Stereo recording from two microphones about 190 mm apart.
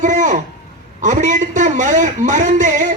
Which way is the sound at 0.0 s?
40° right (ahead or behind).